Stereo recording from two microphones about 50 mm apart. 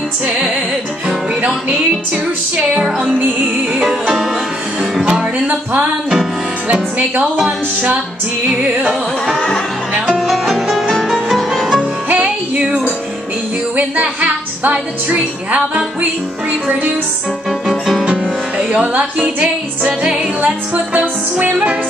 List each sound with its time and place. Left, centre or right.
2.8 s music: centre
5.2 s music: right
10.1 s music: centre
12.1 s music: right
13.7 s music: right
17.6 s music: centre
18.7 s speech: right
19.8 s music: right
20.7 s music: right